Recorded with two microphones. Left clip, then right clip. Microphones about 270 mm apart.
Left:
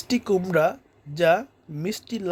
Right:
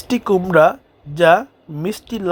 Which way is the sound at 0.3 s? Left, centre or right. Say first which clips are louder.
Right 9 dB; centre.